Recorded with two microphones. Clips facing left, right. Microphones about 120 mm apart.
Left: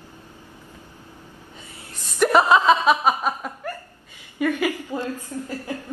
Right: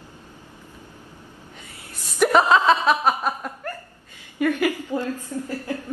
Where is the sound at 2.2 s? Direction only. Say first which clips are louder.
Even; 5° right (ahead or behind).